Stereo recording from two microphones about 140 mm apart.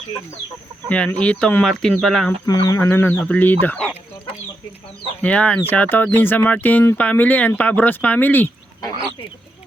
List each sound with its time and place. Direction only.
0.9 s speech: 10° left (ahead or behind)
2.5 s speech: 25° left (ahead or behind)
5.2 s speech: 10° left (ahead or behind)